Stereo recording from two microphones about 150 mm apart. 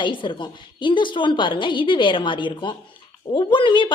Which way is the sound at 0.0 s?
35° left (ahead or behind).